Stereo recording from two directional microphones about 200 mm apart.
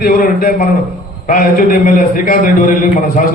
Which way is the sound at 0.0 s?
50° left (ahead or behind).